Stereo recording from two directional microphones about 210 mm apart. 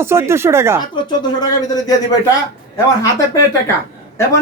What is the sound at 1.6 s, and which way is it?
Speech, 20° left (ahead or behind).